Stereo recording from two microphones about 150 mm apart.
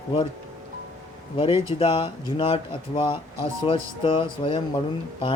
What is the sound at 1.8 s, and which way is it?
Speech, 40° left (ahead or behind).